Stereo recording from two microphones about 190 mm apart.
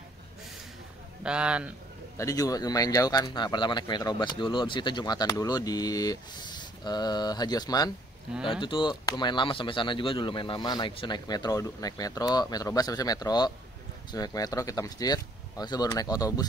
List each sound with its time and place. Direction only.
1.2 s a man's voice: 5° right (ahead or behind)
2.1 s speech: 15° left (ahead or behind)